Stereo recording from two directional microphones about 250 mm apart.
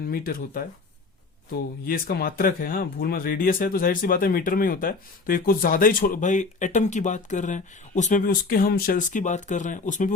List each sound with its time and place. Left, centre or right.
0.1 s speech: left
1.8 s speech: left